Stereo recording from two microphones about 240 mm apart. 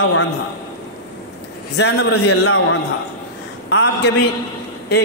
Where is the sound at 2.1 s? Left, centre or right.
Left.